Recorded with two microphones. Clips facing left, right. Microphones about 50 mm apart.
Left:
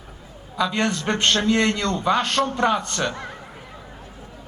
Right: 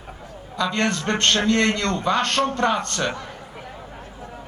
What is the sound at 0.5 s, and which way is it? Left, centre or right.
A man's voice, centre.